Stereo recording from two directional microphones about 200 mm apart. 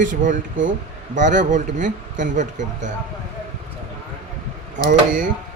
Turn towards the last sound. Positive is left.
turn(degrees=-45)  # may be behind; listen again after turning